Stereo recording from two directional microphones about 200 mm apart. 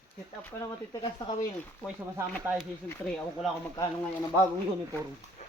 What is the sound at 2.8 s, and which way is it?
Speech, 5° left (ahead or behind).